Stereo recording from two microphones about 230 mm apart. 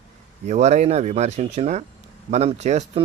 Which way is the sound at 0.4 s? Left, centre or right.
Right.